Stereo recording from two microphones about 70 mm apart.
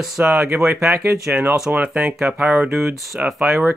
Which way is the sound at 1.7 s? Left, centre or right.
Right.